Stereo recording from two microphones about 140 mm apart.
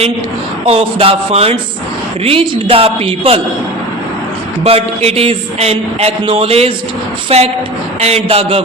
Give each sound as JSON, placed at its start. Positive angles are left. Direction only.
{"t": 0.6, "sound": "speech", "side_deg": -45}
{"t": 4.6, "sound": "speech", "side_deg": -45}